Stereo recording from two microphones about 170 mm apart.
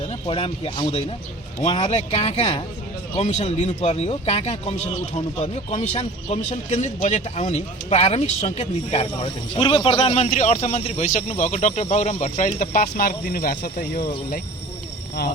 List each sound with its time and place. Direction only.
0.1 s speech: 35° left (ahead or behind)
10.2 s speech: 45° left (ahead or behind)